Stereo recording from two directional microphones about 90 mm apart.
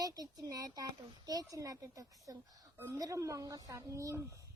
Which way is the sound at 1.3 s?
40° right (ahead or behind).